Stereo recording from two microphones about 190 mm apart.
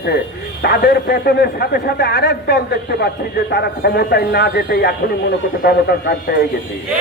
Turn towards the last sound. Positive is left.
turn(degrees=55)  # may be behind; listen again after turning